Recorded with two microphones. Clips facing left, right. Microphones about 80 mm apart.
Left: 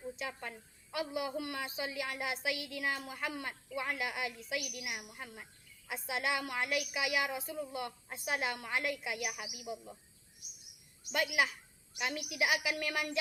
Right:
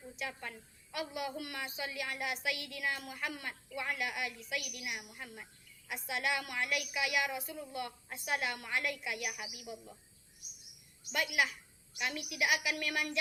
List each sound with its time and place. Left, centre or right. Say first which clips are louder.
0.2 s a woman's voice: left 1 dB; left
0.9 s a woman's voice: left 2 dB; left
11.1 s a woman's voice: left 1 dB; left